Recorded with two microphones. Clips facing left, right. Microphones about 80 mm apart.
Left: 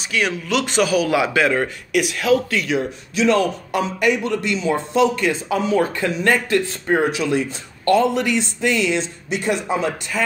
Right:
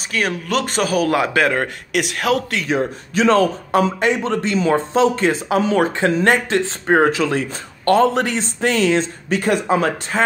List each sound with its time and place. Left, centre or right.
0.3 s speech: right
1.9 s speech: right
2.6 s speech: right
5.3 s speech: right
6.2 s speech: right
6.9 s speech: right